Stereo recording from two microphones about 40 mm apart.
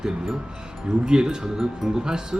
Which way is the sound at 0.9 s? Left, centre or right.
Centre.